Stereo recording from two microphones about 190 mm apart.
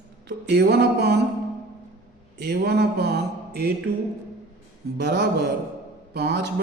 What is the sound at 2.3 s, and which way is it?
Speech, 60° right (ahead or behind).